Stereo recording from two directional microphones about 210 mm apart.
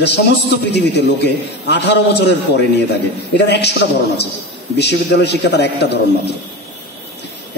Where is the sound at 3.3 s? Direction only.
55° left (ahead or behind).